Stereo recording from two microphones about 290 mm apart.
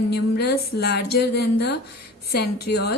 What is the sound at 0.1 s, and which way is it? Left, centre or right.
Speech, left.